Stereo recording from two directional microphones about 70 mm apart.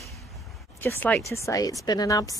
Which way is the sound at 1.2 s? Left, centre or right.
Left.